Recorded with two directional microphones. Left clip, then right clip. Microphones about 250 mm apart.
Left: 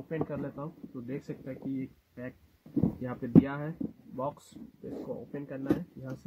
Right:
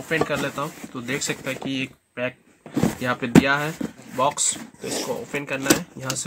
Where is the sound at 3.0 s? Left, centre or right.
Centre.